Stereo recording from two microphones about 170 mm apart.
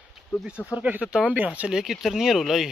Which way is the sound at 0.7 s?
10° right (ahead or behind).